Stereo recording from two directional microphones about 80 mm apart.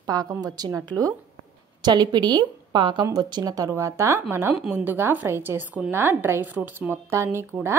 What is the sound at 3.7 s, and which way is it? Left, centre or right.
A woman's voice, right.